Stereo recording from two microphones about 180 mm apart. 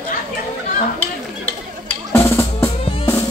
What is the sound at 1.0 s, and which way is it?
Drum, 10° left (ahead or behind).